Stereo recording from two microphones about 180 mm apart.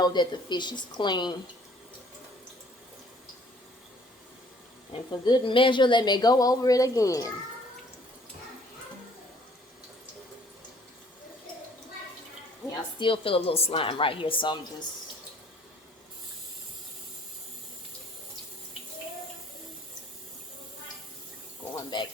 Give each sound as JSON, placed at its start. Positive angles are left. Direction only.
{"t": 0.0, "sound": "speech", "side_deg": 25}
{"t": 4.9, "sound": "speech", "side_deg": 25}
{"t": 13.0, "sound": "speech", "side_deg": 30}
{"t": 21.8, "sound": "a sound", "side_deg": 25}